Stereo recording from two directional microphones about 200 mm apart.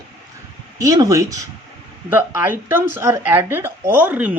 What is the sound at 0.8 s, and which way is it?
Speech, 20° right (ahead or behind).